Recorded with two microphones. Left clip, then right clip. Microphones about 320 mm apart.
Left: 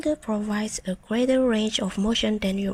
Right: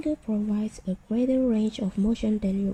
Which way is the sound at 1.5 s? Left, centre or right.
Left.